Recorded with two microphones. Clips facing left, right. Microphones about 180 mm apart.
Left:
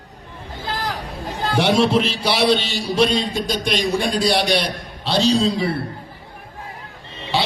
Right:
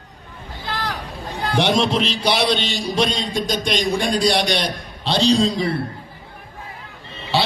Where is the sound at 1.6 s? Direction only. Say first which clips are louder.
Left 2 dB; 5° left (ahead or behind).